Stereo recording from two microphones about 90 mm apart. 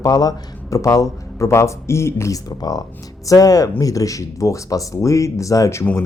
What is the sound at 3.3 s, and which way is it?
Speech, 45° left (ahead or behind).